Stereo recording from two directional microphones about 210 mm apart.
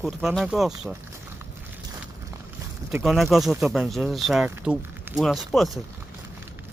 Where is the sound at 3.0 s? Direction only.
Centre (ahead or behind).